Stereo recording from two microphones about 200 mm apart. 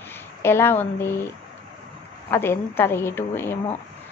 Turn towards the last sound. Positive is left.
turn(degrees=10)  # may be behind; listen again after turning